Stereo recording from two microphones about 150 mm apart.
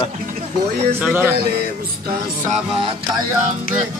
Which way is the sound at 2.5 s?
40° right (ahead or behind).